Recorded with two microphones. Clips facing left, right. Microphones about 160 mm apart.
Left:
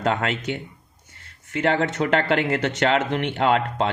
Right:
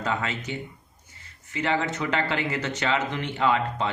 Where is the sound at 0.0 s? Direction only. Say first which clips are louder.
Left 5 dB; 65° left (ahead or behind).